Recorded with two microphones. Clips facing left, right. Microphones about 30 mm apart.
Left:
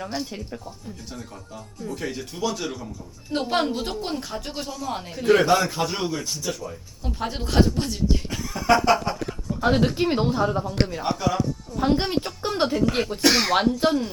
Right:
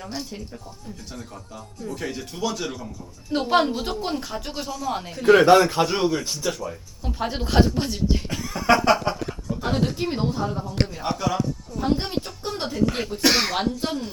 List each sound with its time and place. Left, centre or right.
1.1 s speech: centre
5.5 s a man's voice: right
8.9 s chuckle: centre
9.6 s speech: centre
9.8 s speech: left
10.8 s speech: centre
11.8 s speech: left
13.2 s speech: centre
13.5 s speech: centre